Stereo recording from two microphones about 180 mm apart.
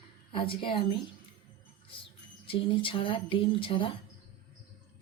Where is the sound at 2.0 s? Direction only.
30° left (ahead or behind).